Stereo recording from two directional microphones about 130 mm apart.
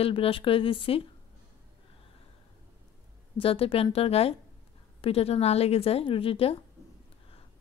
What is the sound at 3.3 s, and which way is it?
Speech, 45° left (ahead or behind).